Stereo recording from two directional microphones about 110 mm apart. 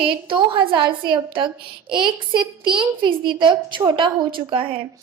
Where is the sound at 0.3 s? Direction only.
50° right (ahead or behind).